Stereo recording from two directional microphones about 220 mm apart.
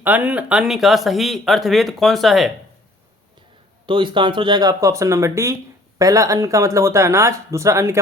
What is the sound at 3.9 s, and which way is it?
Speech, 20° right (ahead or behind).